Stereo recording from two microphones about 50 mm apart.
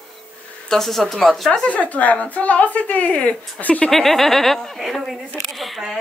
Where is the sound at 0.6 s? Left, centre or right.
Centre.